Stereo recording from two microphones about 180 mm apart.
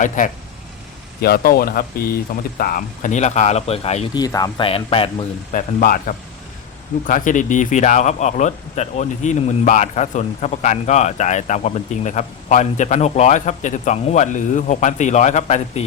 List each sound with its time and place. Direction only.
0.2 s speech: 50° left (ahead or behind)
4.1 s speech: 20° left (ahead or behind)
5.5 s speech: 50° left (ahead or behind)